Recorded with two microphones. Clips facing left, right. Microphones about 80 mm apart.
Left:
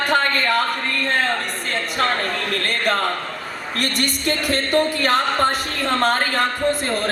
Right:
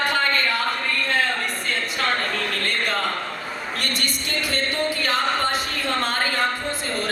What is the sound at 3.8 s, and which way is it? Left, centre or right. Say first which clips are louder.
Speech: left 8 dB; left.